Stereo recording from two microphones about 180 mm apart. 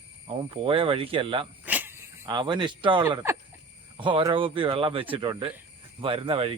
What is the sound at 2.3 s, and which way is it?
Speech, 25° right (ahead or behind).